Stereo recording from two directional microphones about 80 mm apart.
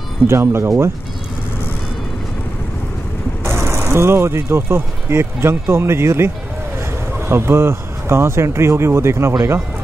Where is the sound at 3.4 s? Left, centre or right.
Right.